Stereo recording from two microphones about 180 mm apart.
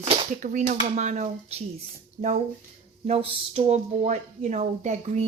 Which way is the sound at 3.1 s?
35° right (ahead or behind).